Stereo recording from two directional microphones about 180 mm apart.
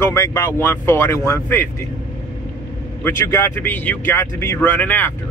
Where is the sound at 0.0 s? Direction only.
15° left (ahead or behind).